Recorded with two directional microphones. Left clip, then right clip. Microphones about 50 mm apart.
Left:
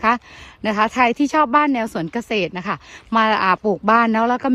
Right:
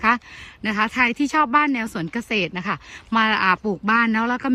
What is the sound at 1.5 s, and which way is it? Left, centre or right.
Speech, left.